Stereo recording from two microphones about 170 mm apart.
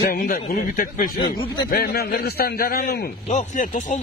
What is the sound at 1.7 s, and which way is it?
A man's voice, 65° left (ahead or behind).